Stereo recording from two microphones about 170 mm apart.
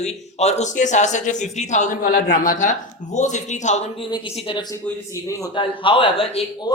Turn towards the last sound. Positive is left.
turn(degrees=30)  # may be behind; listen again after turning